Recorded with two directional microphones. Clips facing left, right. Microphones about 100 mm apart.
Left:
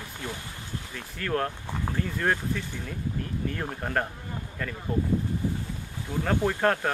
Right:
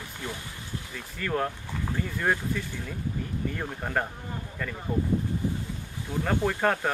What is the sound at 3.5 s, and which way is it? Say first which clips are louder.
Speech: left 1 dB; 5° right (ahead or behind).